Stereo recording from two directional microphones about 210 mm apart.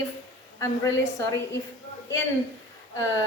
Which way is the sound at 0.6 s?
15° left (ahead or behind).